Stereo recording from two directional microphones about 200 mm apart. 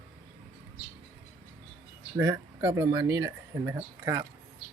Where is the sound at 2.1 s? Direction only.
15° right (ahead or behind).